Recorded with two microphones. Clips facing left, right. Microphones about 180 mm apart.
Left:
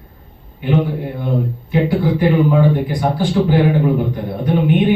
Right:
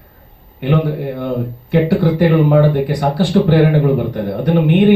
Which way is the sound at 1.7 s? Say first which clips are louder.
Right 3 dB; 75° right (ahead or behind).